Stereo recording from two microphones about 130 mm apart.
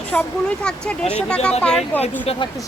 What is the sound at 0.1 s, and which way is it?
Speech, 10° left (ahead or behind).